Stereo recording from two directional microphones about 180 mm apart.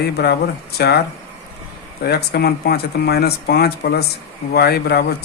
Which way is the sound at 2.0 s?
65° left (ahead or behind).